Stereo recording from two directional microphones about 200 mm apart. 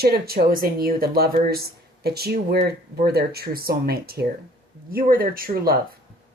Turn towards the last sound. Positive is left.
turn(degrees=-45)  # may be behind; listen again after turning